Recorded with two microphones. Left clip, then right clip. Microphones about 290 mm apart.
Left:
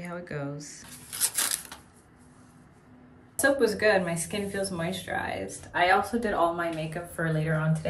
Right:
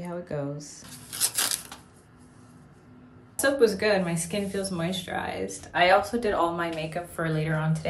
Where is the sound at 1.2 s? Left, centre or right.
Centre.